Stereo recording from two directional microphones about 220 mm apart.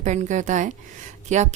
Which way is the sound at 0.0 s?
35° right (ahead or behind).